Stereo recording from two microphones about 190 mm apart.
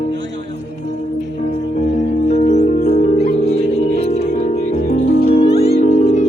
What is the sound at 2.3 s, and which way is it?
Music, 35° left (ahead or behind).